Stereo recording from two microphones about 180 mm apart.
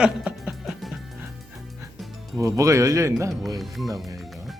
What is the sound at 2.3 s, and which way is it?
Speech, 15° right (ahead or behind).